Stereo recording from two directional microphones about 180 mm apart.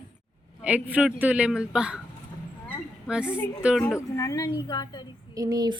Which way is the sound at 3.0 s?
5° right (ahead or behind).